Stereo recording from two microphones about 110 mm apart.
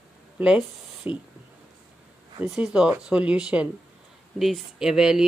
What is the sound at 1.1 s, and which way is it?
Speech, 15° right (ahead or behind).